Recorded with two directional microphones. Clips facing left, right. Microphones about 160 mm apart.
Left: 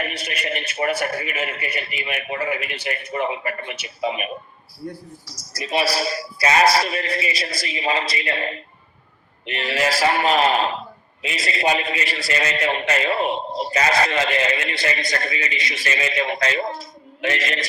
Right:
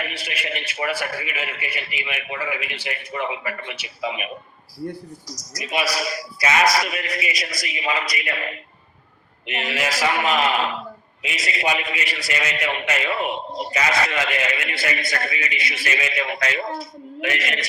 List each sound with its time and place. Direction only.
0.0 s a man's voice: 45° left (ahead or behind)
5.2 s a man's voice: 30° left (ahead or behind)